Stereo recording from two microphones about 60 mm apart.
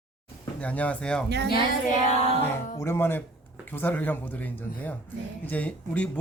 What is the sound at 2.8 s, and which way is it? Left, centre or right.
Speech, left.